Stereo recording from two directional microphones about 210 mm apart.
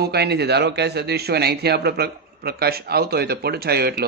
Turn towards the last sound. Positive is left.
turn(degrees=-50)  # may be behind; listen again after turning